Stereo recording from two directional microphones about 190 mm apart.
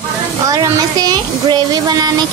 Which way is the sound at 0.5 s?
20° right (ahead or behind).